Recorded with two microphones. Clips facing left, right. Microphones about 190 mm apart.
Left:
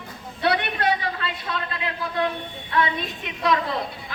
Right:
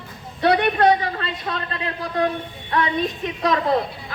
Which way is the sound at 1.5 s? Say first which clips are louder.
Right 3 dB; 45° right (ahead or behind).